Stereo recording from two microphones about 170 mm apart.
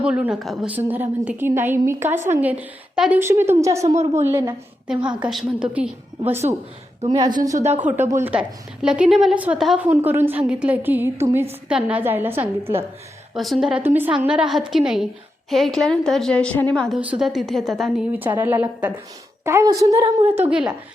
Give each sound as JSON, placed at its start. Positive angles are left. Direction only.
{"t": 0.0, "sound": "a woman's voice", "side_deg": -5}
{"t": 5.0, "sound": "a woman's voice", "side_deg": -5}
{"t": 7.5, "sound": "speech", "side_deg": -40}
{"t": 7.8, "sound": "a woman's voice", "side_deg": -10}
{"t": 13.3, "sound": "a woman's voice", "side_deg": 0}